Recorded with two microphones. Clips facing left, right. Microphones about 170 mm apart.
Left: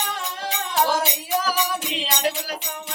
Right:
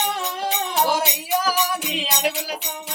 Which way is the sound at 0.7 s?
15° right (ahead or behind).